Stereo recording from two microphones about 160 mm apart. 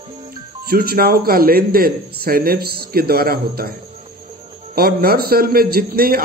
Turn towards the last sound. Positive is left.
turn(degrees=-70)  # may be behind; listen again after turning